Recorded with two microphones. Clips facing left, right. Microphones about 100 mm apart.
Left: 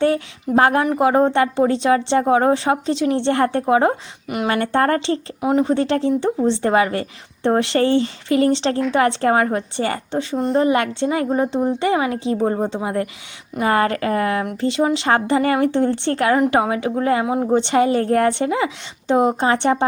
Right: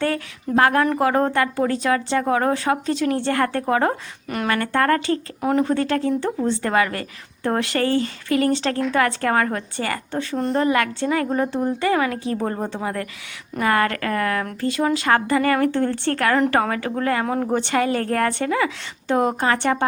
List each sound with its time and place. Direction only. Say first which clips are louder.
0.0 s speech: left 5 dB; 25° left (ahead or behind)
4.4 s speech: left 2 dB; 30° left (ahead or behind)
10.3 s a woman's voice: left 3 dB; centre (ahead or behind)
10.6 s speech: left 2 dB; 25° left (ahead or behind)